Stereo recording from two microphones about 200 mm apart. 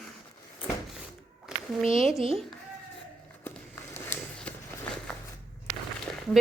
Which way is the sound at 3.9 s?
10° left (ahead or behind).